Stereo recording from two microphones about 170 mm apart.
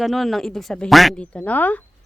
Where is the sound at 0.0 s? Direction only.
Centre (ahead or behind).